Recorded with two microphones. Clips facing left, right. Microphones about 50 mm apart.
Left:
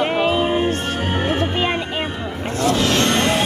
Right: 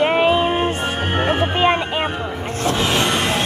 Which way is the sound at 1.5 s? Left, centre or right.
Right.